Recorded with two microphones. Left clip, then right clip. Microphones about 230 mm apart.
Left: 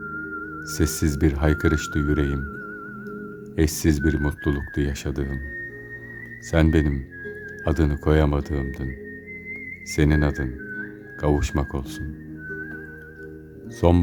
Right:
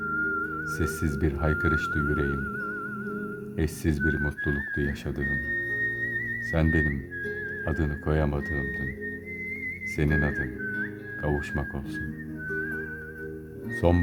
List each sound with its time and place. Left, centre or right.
0.7 s speech: centre
3.6 s speech: centre
6.5 s speech: centre
9.9 s speech: centre
13.8 s speech: centre